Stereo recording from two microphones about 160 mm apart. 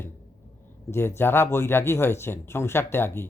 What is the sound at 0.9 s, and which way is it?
Speech, 15° left (ahead or behind).